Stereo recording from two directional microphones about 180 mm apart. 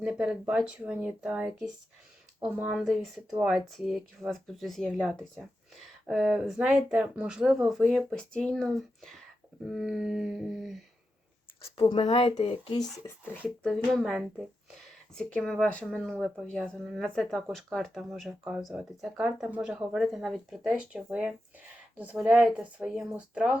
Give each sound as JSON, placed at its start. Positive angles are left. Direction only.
{"t": 0.0, "sound": "speech", "side_deg": -5}
{"t": 11.6, "sound": "speech", "side_deg": 30}
{"t": 13.0, "sound": "speech", "side_deg": 10}